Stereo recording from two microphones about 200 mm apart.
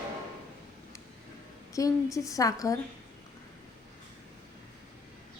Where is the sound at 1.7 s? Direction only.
15° left (ahead or behind).